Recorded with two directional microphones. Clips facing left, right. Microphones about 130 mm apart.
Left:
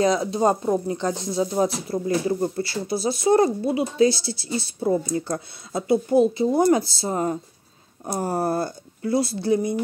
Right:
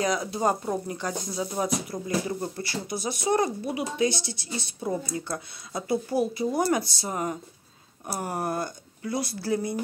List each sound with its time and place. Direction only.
0.0 s speech: 25° left (ahead or behind)